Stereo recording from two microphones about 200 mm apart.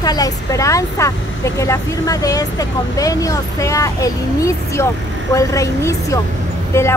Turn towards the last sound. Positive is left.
turn(degrees=15)  # may be behind; listen again after turning